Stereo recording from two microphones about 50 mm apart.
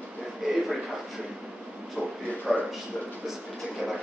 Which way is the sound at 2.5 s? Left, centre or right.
Centre.